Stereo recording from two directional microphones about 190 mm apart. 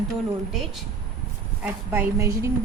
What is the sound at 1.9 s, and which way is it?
Speech, 15° right (ahead or behind).